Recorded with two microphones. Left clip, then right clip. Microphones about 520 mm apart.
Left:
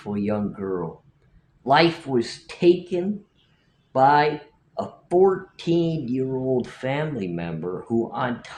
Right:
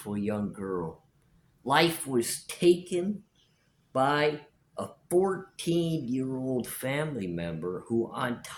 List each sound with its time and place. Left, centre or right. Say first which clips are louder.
0.0 s speech: left 6 dB; right